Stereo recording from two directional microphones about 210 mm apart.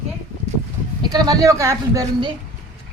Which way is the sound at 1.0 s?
20° right (ahead or behind).